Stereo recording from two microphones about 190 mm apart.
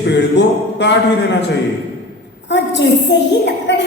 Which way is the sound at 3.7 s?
65° left (ahead or behind).